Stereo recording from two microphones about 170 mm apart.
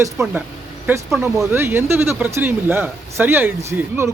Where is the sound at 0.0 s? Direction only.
15° right (ahead or behind).